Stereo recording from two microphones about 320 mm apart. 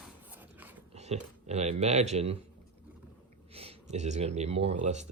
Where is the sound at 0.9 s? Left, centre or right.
Centre.